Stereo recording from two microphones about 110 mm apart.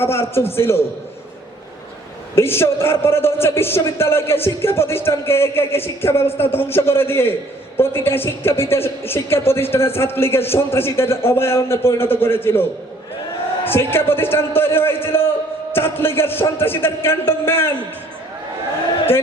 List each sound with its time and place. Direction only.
0.0 s a man's voice: 20° left (ahead or behind)
2.3 s a man's voice: 20° left (ahead or behind)
13.7 s a man's voice: 20° left (ahead or behind)